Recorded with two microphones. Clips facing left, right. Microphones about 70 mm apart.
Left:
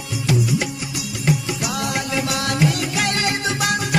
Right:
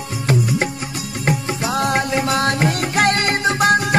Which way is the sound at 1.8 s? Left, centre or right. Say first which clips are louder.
Right 7 dB; right.